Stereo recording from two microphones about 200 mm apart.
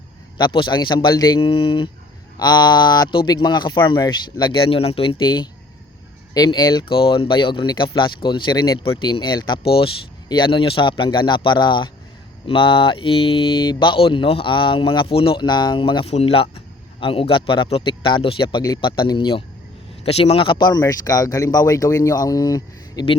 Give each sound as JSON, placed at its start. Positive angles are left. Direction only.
{"t": 0.3, "sound": "speech", "side_deg": 20}